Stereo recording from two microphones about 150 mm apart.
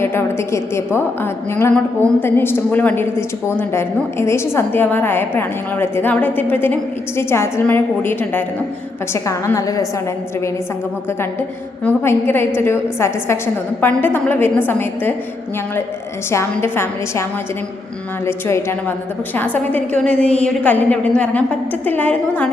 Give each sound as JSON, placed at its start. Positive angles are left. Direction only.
{"t": 0.0, "sound": "a woman's voice", "side_deg": 15}
{"t": 11.9, "sound": "a woman's voice", "side_deg": 15}
{"t": 16.3, "sound": "a woman's voice", "side_deg": 15}
{"t": 18.3, "sound": "a woman's voice", "side_deg": 15}